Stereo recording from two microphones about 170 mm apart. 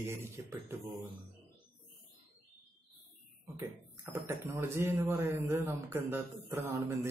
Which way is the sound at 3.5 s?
15° right (ahead or behind).